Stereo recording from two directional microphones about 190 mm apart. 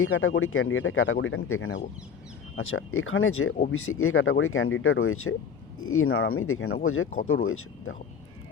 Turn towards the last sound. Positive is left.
turn(degrees=90)